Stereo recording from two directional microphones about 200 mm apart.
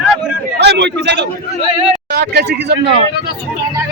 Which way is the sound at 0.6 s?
55° right (ahead or behind).